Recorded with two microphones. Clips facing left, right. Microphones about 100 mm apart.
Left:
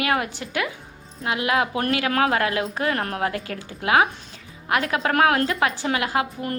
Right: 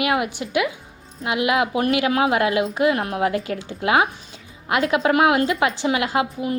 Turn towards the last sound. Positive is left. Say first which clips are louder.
# right 4 dB
turn(degrees=-5)  # may be behind; listen again after turning